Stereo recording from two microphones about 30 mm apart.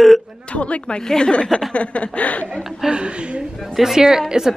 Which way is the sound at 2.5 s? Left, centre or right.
Centre.